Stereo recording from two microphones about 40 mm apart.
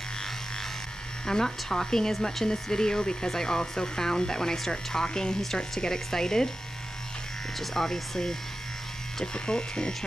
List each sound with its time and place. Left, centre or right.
1.2 s speech: centre
7.5 s speech: centre
9.2 s speech: left